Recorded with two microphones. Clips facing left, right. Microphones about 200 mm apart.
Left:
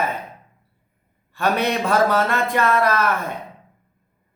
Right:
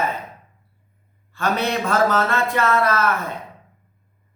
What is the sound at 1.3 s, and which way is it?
Speech, 10° left (ahead or behind).